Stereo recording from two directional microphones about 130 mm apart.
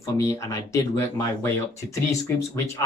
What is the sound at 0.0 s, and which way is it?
Speech, 25° left (ahead or behind).